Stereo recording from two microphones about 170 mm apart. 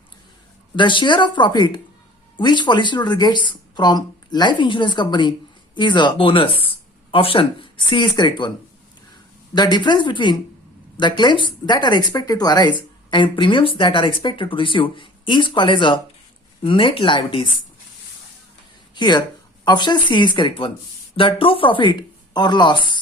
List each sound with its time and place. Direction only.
0.8 s speech: 30° left (ahead or behind)
9.6 s speech: 25° left (ahead or behind)
18.9 s speech: 25° left (ahead or behind)